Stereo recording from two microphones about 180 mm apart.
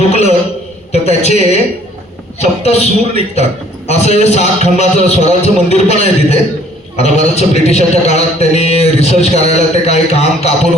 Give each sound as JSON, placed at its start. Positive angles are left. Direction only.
{"t": 0.1, "sound": "a man's voice", "side_deg": 35}
{"t": 0.9, "sound": "a sound", "side_deg": 40}
{"t": 2.4, "sound": "a man's voice", "side_deg": 35}